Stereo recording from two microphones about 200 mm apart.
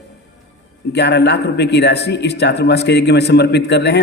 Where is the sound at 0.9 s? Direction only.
60° left (ahead or behind).